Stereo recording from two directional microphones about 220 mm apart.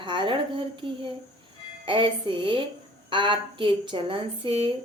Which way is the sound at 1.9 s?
20° right (ahead or behind).